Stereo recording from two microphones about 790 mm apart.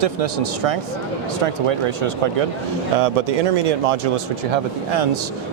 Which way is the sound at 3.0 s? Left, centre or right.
Right.